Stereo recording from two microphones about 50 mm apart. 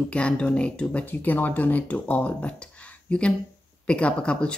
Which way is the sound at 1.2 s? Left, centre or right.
Left.